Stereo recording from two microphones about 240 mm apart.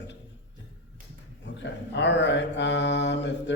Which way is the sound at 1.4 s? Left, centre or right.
Left.